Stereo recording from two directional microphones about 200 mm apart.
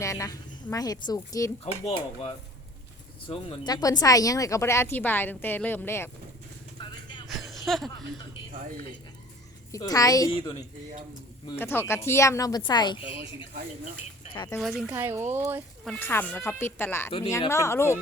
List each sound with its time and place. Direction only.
0.0 s speech: 15° left (ahead or behind)
1.6 s a woman's voice: 30° left (ahead or behind); by 6.1 s 10° left (ahead or behind)
6.7 s vehicle: 25° left (ahead or behind)
7.3 s a sound: centre (ahead or behind)
9.7 s a woman's voice: 20° left (ahead or behind)
14.3 s a woman's voice: 20° left (ahead or behind)
14.6 s speech: centre (ahead or behind)
15.9 s speech: 10° left (ahead or behind)